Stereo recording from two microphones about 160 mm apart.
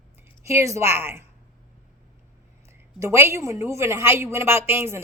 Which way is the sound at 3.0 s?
15° right (ahead or behind).